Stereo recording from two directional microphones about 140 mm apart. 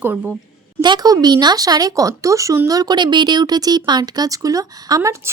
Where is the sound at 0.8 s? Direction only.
30° right (ahead or behind).